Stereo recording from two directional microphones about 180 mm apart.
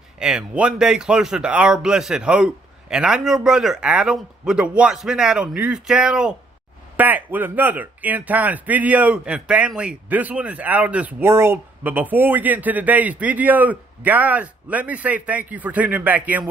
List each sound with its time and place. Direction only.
0.2 s speech: 5° right (ahead or behind)